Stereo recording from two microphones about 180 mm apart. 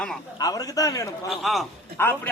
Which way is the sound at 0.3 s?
20° left (ahead or behind).